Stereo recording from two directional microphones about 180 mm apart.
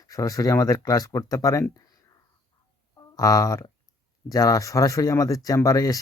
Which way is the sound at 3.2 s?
20° left (ahead or behind).